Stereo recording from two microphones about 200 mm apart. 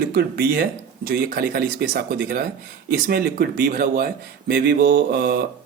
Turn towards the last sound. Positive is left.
turn(degrees=-50)  # may be behind; listen again after turning